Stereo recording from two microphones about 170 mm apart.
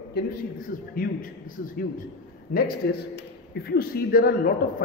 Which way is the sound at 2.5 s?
60° left (ahead or behind).